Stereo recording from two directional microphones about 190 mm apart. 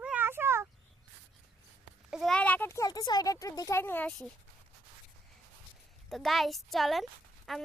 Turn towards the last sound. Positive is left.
turn(degrees=0)  # may be behind; listen again after turning